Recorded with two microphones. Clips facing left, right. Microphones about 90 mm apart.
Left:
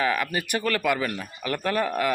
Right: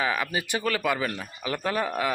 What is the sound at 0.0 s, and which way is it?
Speech, 20° right (ahead or behind).